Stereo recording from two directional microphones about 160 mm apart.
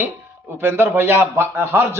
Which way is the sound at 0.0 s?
15° right (ahead or behind).